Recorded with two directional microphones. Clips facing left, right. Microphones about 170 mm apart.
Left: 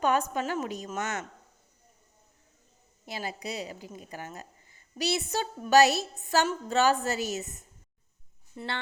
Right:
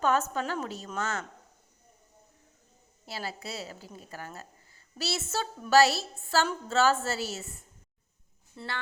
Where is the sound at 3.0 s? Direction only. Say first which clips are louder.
Left 2 dB; 15° left (ahead or behind).